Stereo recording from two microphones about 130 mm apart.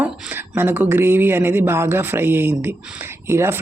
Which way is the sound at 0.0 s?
15° right (ahead or behind).